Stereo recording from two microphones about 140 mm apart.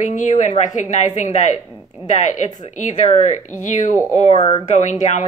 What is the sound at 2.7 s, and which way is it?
Speech, 60° left (ahead or behind).